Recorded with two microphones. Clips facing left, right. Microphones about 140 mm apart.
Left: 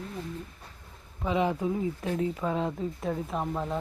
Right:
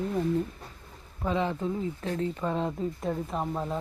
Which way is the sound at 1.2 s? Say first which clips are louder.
Left 1 dB; 15° left (ahead or behind).